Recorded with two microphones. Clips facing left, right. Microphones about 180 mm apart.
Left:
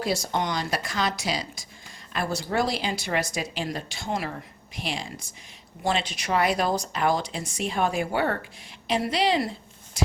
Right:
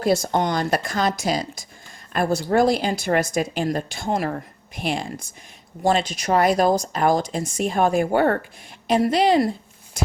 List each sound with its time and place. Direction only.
0.0 s a woman's voice: 50° right (ahead or behind)